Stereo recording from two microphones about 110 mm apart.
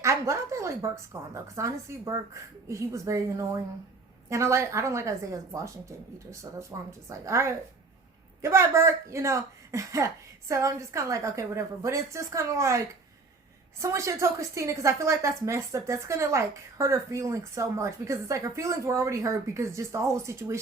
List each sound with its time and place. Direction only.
0.0 s a woman's voice: 25° right (ahead or behind)